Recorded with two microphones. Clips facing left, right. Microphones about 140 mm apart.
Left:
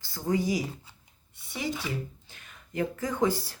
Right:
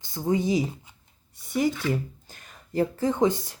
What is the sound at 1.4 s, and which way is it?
Speech, 45° right (ahead or behind).